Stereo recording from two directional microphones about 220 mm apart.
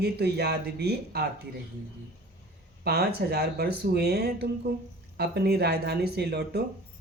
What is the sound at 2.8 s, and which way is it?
Speech, 45° right (ahead or behind).